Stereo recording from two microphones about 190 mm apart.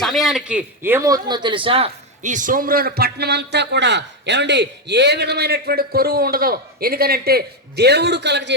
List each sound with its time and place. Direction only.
0.0 s a man's voice: centre (ahead or behind); by 8.5 s 65° right (ahead or behind)